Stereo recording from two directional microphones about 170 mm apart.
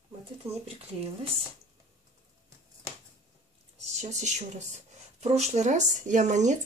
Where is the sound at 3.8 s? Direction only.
45° right (ahead or behind).